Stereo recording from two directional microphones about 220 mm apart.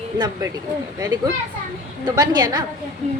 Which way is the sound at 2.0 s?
15° right (ahead or behind).